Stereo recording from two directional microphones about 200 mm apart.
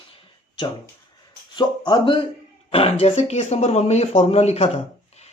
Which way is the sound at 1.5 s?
25° left (ahead or behind).